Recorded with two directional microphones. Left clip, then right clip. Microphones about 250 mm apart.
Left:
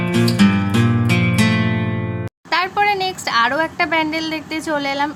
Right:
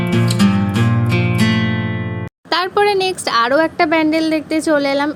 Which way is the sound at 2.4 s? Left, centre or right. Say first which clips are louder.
Right 2 dB; centre.